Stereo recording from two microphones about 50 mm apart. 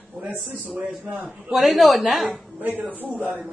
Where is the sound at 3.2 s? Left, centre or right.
Right.